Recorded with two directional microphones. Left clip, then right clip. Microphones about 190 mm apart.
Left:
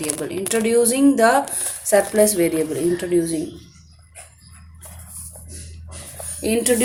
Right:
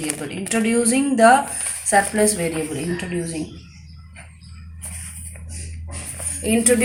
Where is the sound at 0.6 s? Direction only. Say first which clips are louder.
Left 5 dB; 70° left (ahead or behind).